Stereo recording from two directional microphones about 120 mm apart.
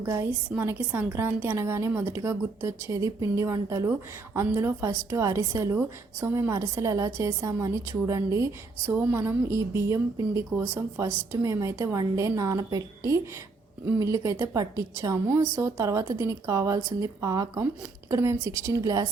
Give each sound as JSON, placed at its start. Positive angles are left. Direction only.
{"t": 0.0, "sound": "a woman's voice", "side_deg": -25}